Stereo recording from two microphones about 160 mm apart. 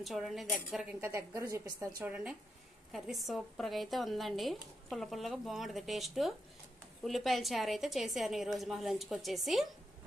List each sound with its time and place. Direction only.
0.0 s speech: centre (ahead or behind)
1.0 s a woman's voice: 20° right (ahead or behind)
2.0 s speech: 10° right (ahead or behind)